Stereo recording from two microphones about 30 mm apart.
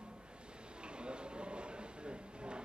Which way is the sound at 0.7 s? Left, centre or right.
Right.